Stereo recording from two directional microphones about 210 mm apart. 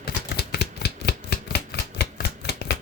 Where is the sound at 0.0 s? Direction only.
50° left (ahead or behind).